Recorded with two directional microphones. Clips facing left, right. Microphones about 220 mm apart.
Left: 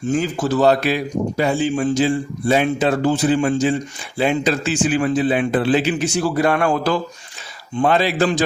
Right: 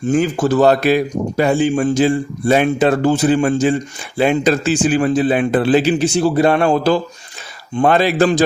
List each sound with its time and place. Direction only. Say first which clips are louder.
0.1 s a man's voice: right 4 dB; 55° right (ahead or behind)
4.6 s a man's voice: right 3 dB; 40° right (ahead or behind)
6.1 s a man's voice: right 3 dB; 25° right (ahead or behind)
7.8 s a man's voice: right 4 dB; 50° right (ahead or behind)